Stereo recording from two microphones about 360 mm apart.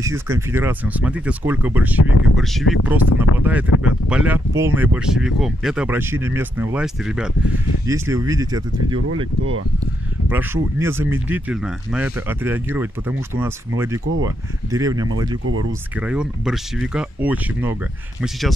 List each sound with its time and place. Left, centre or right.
0.0 s speech: centre
10.3 s speech: centre
14.2 s speech: centre
15.4 s speech: right
16.0 s speech: centre